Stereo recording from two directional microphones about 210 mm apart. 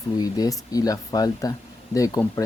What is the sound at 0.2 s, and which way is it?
Speech, 15° left (ahead or behind).